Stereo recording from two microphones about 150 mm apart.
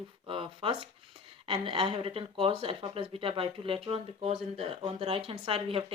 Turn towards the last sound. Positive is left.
turn(degrees=-40)  # may be behind; listen again after turning